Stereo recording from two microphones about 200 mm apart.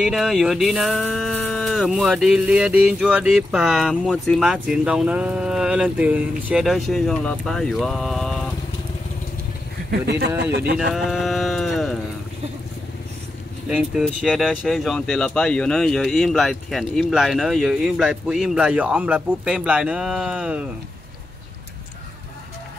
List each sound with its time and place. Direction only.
0.0 s speech: 5° right (ahead or behind)
9.8 s speech: 55° right (ahead or behind)
10.8 s speech: centre (ahead or behind)
13.7 s speech: 5° right (ahead or behind)